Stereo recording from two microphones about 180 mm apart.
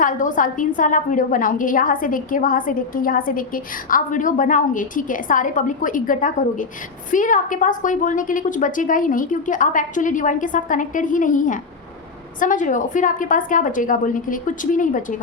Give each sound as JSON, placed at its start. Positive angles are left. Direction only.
{"t": 0.0, "sound": "a woman's voice", "side_deg": 45}